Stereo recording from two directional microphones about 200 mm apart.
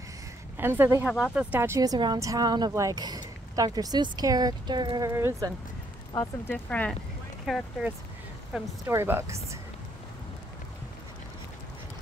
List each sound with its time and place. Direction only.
0.6 s speech: 10° right (ahead or behind)
6.1 s speech: 10° left (ahead or behind)
8.5 s speech: 10° right (ahead or behind)